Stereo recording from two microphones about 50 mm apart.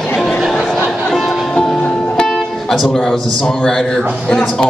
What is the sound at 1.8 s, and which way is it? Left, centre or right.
Music, left.